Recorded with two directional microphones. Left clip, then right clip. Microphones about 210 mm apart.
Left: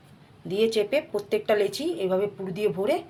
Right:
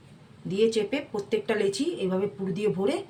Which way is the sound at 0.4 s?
30° left (ahead or behind).